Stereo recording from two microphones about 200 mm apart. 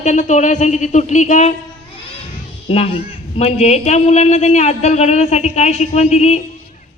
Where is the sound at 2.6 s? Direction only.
30° left (ahead or behind).